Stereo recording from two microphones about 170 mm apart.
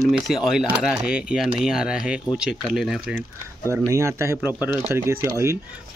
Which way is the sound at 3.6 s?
15° right (ahead or behind).